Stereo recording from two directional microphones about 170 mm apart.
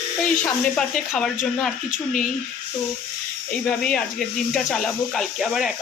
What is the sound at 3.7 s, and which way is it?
Speech, 5° left (ahead or behind).